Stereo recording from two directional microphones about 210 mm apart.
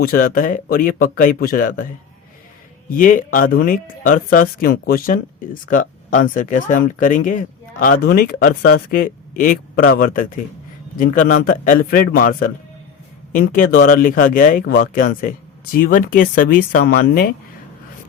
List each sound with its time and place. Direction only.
0.0 s speech: 45° left (ahead or behind)
2.9 s speech: 40° left (ahead or behind)